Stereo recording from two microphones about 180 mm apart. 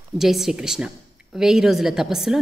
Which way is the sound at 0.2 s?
Centre (ahead or behind).